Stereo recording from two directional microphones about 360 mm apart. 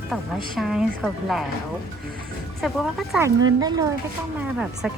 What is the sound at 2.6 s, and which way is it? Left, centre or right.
A woman's voice, centre.